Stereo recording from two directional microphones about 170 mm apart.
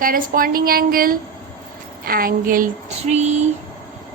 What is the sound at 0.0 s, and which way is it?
A woman's voice, 55° right (ahead or behind).